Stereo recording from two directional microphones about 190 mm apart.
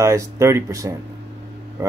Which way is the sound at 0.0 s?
15° right (ahead or behind).